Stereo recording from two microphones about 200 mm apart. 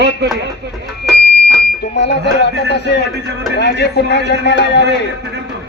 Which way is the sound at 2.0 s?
60° left (ahead or behind).